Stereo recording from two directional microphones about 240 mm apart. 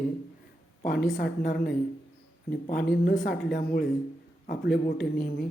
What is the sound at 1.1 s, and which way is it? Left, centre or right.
Speech, left.